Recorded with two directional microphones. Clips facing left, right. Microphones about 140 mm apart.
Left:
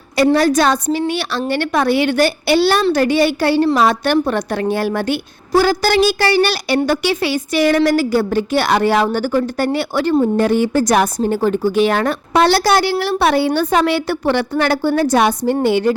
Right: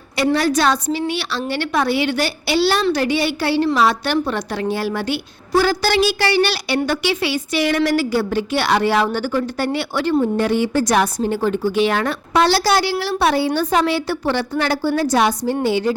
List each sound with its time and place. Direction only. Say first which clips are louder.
0.2 s a woman's voice: left 4 dB; 45° left (ahead or behind); by 16.0 s 60° left (ahead or behind)